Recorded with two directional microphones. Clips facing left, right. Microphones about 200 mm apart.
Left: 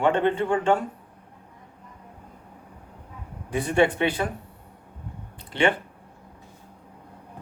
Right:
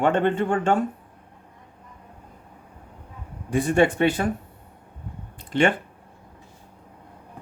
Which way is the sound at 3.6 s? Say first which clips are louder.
Right 2 dB; 45° right (ahead or behind).